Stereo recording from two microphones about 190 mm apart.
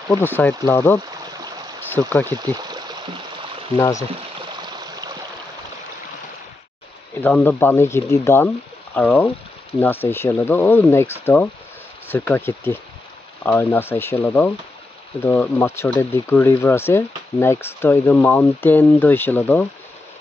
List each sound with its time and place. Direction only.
0.1 s speech: 10° left (ahead or behind)
2.4 s speech: 20° right (ahead or behind)
3.7 s speech: 15° left (ahead or behind)
7.2 s speech: 10° left (ahead or behind)